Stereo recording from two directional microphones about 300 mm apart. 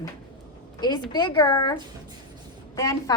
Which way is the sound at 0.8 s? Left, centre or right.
Centre.